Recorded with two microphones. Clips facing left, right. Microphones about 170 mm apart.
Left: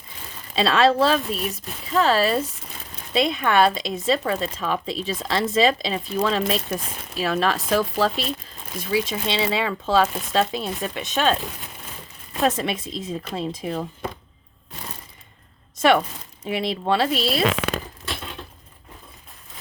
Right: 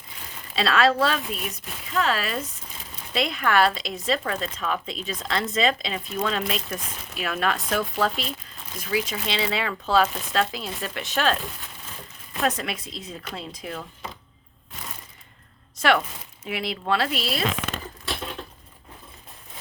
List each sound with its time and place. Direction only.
0.5 s speech: 25° left (ahead or behind)
15.8 s speech: 25° left (ahead or behind)
17.4 s speech: 75° left (ahead or behind)